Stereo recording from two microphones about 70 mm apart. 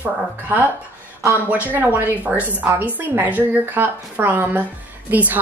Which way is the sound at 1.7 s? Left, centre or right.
Right.